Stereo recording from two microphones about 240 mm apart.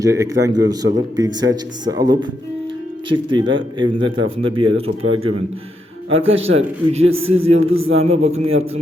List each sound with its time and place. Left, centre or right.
0.0 s a man's voice: centre
4.7 s speech: right
6.1 s a man's voice: right